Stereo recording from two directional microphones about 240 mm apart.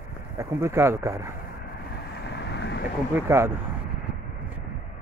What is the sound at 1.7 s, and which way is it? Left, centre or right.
Vehicle, left.